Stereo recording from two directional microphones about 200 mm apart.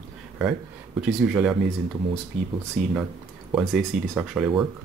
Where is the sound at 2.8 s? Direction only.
35° right (ahead or behind).